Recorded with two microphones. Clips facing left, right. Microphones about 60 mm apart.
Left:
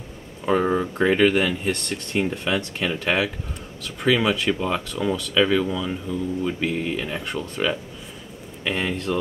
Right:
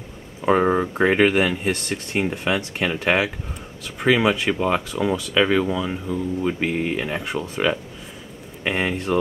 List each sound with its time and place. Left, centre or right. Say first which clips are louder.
0.5 s speech: right 3 dB; right
1.3 s speech: right 2 dB; centre
7.4 s speech: right 3 dB; centre